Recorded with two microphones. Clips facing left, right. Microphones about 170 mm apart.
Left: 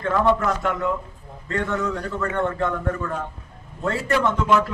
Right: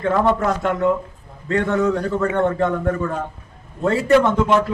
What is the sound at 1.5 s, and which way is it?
Speech, 20° right (ahead or behind).